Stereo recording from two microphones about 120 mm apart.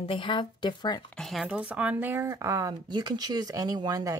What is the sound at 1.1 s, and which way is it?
Speech, centre (ahead or behind).